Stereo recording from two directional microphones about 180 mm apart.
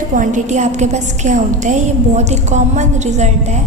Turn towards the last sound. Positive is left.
turn(degrees=-40)  # may be behind; listen again after turning